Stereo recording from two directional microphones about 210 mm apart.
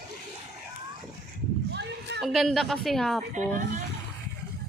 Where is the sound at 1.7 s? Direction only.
55° right (ahead or behind).